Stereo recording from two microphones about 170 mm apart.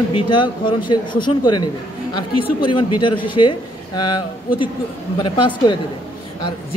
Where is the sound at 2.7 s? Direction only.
30° left (ahead or behind).